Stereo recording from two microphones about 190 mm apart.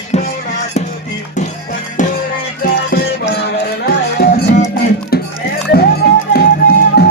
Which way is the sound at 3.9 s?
55° left (ahead or behind).